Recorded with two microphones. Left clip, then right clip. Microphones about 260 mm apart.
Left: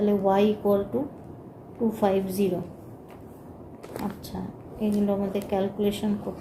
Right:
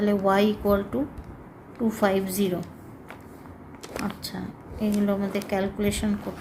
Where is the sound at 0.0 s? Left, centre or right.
Right.